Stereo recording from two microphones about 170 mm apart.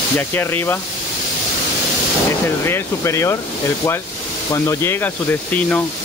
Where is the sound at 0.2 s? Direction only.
10° left (ahead or behind).